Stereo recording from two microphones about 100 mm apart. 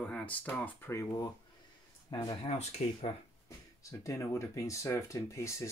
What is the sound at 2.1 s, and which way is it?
Speech, 50° left (ahead or behind).